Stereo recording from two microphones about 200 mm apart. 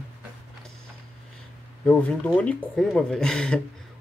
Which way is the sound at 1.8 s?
5° left (ahead or behind).